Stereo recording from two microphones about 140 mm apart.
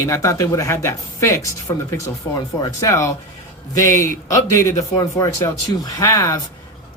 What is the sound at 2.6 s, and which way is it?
Speech, 20° left (ahead or behind).